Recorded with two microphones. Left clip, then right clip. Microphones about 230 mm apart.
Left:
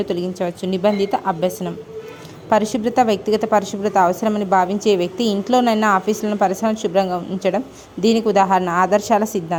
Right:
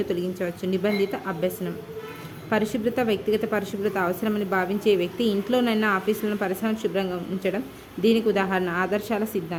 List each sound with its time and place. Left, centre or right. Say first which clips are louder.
0.0 s a woman's voice: left 5 dB; left